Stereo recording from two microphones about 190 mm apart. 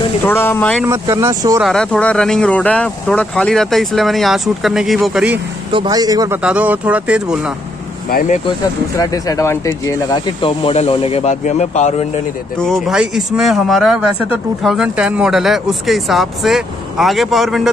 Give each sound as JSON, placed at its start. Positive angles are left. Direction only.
{"t": 0.3, "sound": "speech", "side_deg": 10}
{"t": 0.8, "sound": "speech", "side_deg": -15}
{"t": 1.6, "sound": "speech", "side_deg": 5}
{"t": 5.7, "sound": "speech", "side_deg": -25}
{"t": 6.4, "sound": "speech", "side_deg": -5}
{"t": 8.1, "sound": "speech", "side_deg": 45}
{"t": 8.9, "sound": "speech", "side_deg": 20}
{"t": 12.5, "sound": "speech", "side_deg": 0}